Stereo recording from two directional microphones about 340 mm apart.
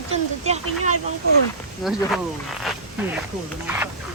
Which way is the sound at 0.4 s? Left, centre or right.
Centre.